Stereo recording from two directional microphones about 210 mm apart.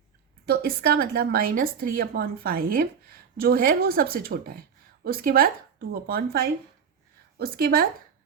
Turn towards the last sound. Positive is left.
turn(degrees=-45)  # may be behind; listen again after turning